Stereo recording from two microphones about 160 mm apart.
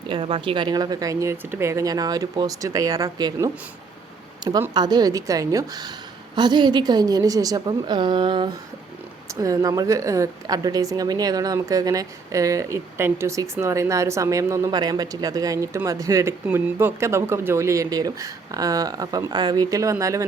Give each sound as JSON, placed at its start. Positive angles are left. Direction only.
{"t": 0.1, "sound": "a woman's voice", "side_deg": -35}
{"t": 4.7, "sound": "a woman's voice", "side_deg": -25}